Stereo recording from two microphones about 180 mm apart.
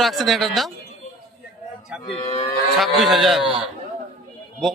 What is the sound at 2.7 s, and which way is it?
Speech, centre (ahead or behind).